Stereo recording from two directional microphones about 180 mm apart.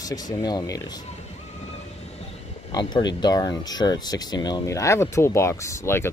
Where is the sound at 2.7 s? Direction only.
25° left (ahead or behind).